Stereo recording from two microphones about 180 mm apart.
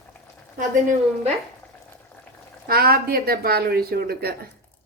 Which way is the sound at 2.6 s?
55° right (ahead or behind).